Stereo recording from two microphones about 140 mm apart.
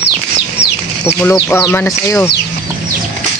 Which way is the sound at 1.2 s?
20° left (ahead or behind).